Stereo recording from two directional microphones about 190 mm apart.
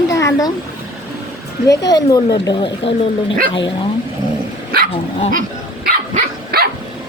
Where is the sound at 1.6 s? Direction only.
20° left (ahead or behind).